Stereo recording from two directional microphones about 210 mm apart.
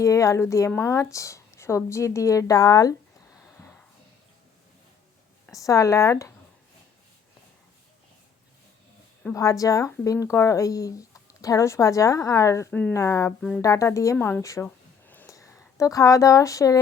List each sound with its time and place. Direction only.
0.0 s speech: 15° left (ahead or behind)
5.5 s speech: 15° left (ahead or behind)
9.3 s speech: 15° left (ahead or behind)